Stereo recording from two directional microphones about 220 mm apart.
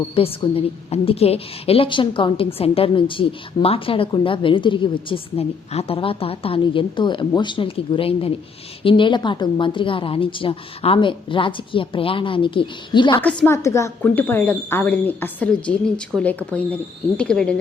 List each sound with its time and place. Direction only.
0.2 s a woman's voice: 25° left (ahead or behind)
13.2 s speech: 10° left (ahead or behind)